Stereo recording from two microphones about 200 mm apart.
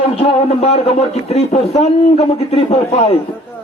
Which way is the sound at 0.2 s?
30° left (ahead or behind).